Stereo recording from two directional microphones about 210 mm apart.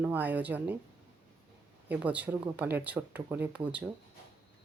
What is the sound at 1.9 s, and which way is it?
Speech, 5° right (ahead or behind).